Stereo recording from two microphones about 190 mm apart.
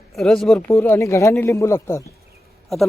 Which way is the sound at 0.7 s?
15° left (ahead or behind).